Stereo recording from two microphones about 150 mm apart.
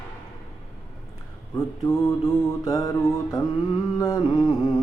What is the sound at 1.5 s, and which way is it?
Mantra, 20° left (ahead or behind).